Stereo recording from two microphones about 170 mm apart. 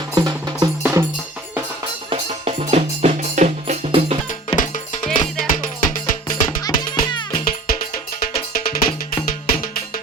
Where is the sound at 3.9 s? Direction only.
35° right (ahead or behind).